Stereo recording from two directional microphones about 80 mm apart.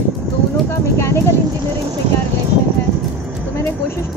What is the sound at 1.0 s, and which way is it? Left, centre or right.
Speech, left.